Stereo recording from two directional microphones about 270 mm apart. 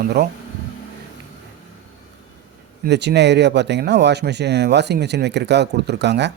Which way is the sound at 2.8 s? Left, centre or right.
Right.